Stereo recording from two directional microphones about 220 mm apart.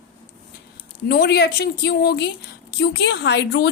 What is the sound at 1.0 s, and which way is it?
A woman's voice, 45° left (ahead or behind).